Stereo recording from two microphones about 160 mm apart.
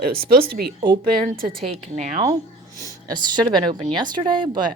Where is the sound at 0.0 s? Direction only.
70° right (ahead or behind).